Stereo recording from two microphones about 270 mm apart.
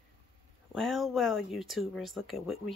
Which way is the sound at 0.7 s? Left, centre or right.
Centre.